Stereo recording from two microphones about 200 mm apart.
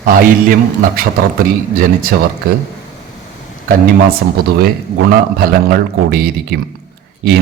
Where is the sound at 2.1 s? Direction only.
50° right (ahead or behind).